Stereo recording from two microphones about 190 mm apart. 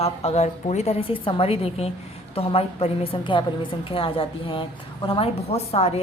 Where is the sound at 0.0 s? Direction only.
30° left (ahead or behind).